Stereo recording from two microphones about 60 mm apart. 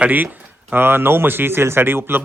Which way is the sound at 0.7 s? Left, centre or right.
Right.